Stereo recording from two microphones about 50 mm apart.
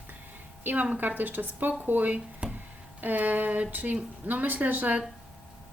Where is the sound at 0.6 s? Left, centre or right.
Right.